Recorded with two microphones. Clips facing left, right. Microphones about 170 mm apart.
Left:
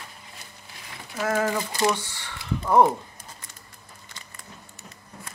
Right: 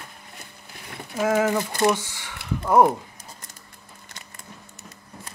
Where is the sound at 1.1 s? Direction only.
15° right (ahead or behind).